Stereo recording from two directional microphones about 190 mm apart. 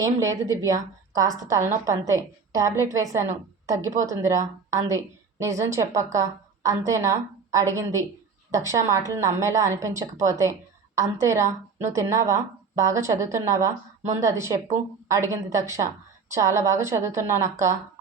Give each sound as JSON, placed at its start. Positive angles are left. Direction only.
{"t": 0.0, "sound": "a woman's voice", "side_deg": -15}